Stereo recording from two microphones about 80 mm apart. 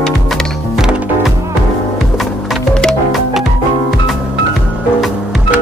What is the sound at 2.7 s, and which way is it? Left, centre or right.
Music, centre.